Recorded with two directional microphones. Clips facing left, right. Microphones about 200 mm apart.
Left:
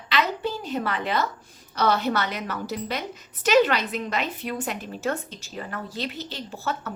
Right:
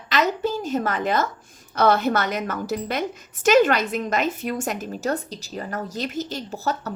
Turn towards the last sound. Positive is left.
turn(degrees=-40)  # may be behind; listen again after turning